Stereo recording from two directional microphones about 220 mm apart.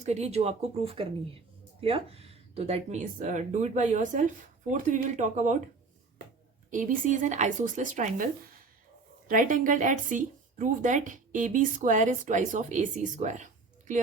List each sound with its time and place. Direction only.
0.0 s speech: 30° right (ahead or behind)
6.7 s speech: 35° right (ahead or behind)